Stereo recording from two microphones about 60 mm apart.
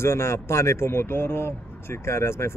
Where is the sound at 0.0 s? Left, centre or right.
Left.